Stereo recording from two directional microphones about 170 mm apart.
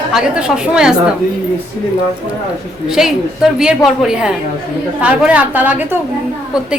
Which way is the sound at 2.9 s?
5° right (ahead or behind).